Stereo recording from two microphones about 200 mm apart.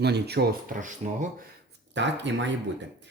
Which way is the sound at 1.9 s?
65° right (ahead or behind).